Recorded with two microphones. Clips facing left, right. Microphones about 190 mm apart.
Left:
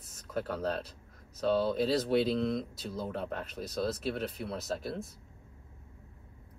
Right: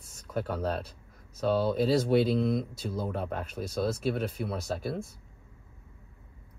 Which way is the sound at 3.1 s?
50° right (ahead or behind).